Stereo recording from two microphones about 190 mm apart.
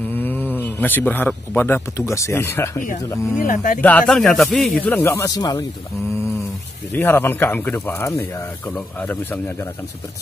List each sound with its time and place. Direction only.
0.1 s speech: 10° left (ahead or behind)
3.4 s speech: 45° left (ahead or behind)
3.8 s speech: 5° left (ahead or behind)
6.9 s speech: 10° left (ahead or behind)